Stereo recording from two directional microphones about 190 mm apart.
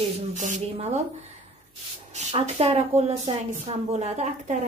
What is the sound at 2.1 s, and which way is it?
A woman's voice, 35° right (ahead or behind).